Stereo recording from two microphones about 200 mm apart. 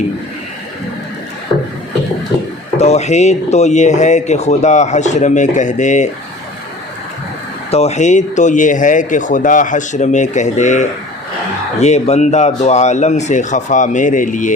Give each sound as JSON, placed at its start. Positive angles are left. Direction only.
{"t": 2.7, "sound": "speech", "side_deg": 35}
{"t": 7.7, "sound": "speech", "side_deg": 30}